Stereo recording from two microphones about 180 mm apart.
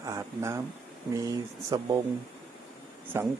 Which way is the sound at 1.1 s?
20° right (ahead or behind).